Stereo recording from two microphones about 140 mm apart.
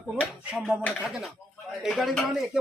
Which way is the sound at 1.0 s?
Centre (ahead or behind).